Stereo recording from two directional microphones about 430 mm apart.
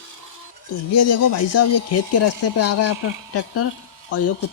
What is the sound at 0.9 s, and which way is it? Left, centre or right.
Speech, left.